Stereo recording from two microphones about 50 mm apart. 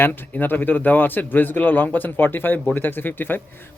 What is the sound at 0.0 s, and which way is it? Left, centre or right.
Speech, left.